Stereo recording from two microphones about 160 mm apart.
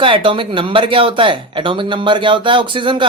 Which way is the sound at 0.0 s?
30° right (ahead or behind).